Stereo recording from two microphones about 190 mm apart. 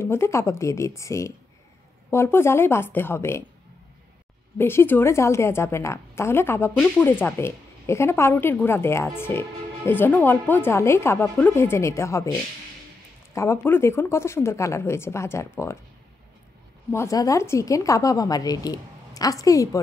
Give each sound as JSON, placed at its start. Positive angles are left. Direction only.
{"t": 0.0, "sound": "a woman's voice", "side_deg": 15}
{"t": 4.6, "sound": "a woman's voice", "side_deg": 10}
{"t": 16.9, "sound": "a woman's voice", "side_deg": 15}